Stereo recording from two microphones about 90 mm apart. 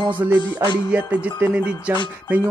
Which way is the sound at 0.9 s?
15° right (ahead or behind).